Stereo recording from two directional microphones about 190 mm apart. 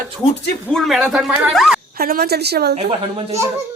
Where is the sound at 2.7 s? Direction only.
35° right (ahead or behind).